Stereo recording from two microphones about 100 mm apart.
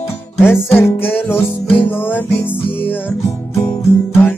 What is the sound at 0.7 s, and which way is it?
Music, 25° left (ahead or behind).